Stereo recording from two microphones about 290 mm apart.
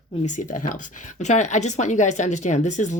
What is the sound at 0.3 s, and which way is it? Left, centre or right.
Speech, left.